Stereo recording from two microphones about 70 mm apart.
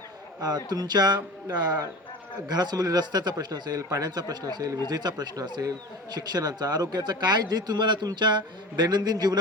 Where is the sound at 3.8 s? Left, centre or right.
Right.